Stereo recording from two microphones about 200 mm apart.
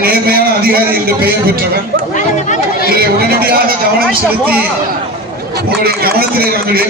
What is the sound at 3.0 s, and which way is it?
A man's voice, 50° right (ahead or behind).